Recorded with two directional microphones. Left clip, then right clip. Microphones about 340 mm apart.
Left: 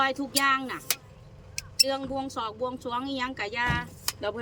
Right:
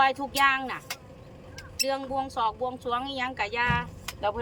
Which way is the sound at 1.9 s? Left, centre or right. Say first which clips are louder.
Right 1 dB; centre.